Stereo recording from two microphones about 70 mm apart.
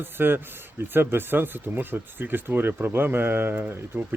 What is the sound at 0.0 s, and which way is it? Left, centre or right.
Speech, right.